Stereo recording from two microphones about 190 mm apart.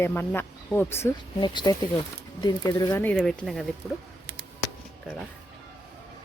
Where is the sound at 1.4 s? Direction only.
25° left (ahead or behind); by 3.7 s centre (ahead or behind).